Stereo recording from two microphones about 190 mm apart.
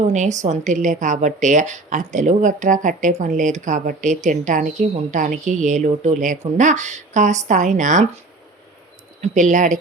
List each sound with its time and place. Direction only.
0.0 s a woman's voice: 40° right (ahead or behind)
9.2 s a woman's voice: 40° right (ahead or behind)